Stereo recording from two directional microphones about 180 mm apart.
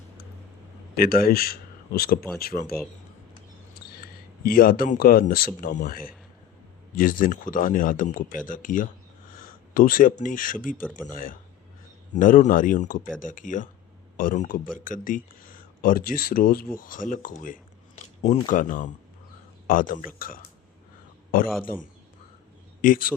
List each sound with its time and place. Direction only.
0.9 s a man's voice: 55° left (ahead or behind)
3.8 s speech: 55° left (ahead or behind)
22.8 s a man's voice: 50° left (ahead or behind)